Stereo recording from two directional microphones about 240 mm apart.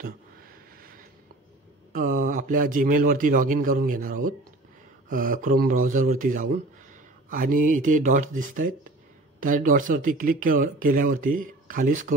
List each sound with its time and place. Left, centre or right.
1.9 s speech: right